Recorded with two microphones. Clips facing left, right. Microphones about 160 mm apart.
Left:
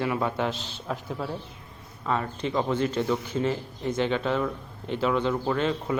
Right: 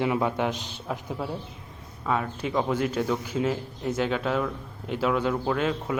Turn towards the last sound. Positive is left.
turn(degrees=-5)  # may be behind; listen again after turning